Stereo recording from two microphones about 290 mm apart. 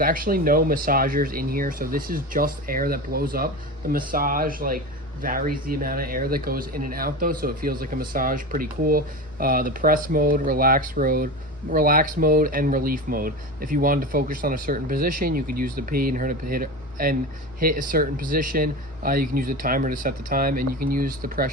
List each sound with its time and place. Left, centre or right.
0.0 s speech: right